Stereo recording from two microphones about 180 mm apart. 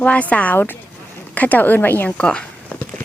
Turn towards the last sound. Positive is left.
turn(degrees=5)  # may be behind; listen again after turning